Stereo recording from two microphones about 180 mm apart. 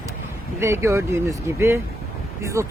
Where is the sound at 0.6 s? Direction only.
15° right (ahead or behind).